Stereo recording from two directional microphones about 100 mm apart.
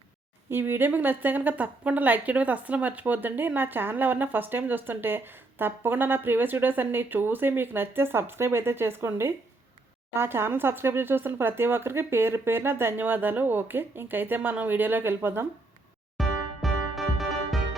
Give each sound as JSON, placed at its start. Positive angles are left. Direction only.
{"t": 0.5, "sound": "a woman's voice", "side_deg": -20}
{"t": 16.1, "sound": "music", "side_deg": 0}